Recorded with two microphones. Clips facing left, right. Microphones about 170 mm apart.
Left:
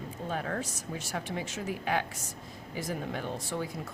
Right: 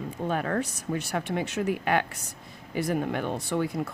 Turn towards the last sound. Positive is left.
turn(degrees=-65)  # may be behind; listen again after turning